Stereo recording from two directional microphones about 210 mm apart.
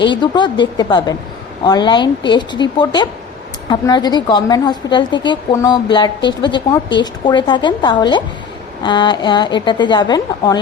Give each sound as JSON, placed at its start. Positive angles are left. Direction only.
{"t": 0.1, "sound": "a woman's voice", "side_deg": 20}